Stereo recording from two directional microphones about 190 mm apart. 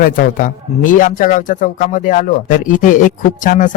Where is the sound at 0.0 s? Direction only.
45° left (ahead or behind).